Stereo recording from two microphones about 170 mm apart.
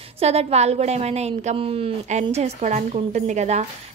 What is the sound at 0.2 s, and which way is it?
Speech, 40° right (ahead or behind).